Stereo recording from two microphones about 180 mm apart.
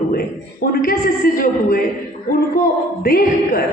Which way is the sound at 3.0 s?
55° left (ahead or behind).